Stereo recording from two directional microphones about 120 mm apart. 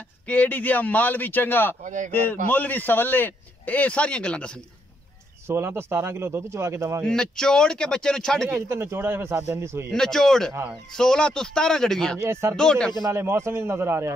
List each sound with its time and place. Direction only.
0.3 s a man's voice: 15° left (ahead or behind)
1.8 s speech: 90° right
2.5 s a man's voice: 15° left (ahead or behind)
5.5 s a man's voice: 20° right (ahead or behind)
7.1 s speech: 5° left (ahead or behind)
8.5 s a man's voice: 20° right (ahead or behind)
9.8 s speech: 5° left (ahead or behind)
12.2 s a man's voice: 20° right (ahead or behind)
12.5 s a man's voice: 5° left (ahead or behind)
13.0 s a man's voice: 20° right (ahead or behind)